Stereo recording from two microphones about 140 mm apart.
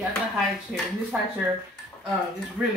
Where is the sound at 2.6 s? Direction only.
10° right (ahead or behind).